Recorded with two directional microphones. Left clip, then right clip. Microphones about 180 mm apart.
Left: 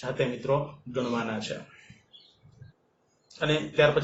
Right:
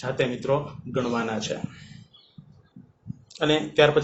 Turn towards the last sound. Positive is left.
turn(degrees=-35)  # may be behind; listen again after turning